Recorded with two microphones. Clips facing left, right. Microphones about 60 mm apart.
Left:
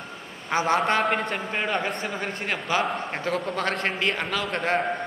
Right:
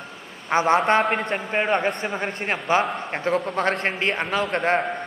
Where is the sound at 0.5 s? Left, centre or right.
Right.